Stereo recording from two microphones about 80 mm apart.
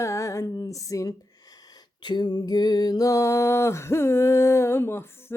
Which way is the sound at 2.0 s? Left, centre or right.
Left.